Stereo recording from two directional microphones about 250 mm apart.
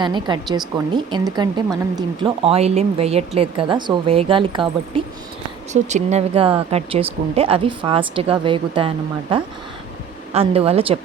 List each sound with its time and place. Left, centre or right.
0.0 s speech: centre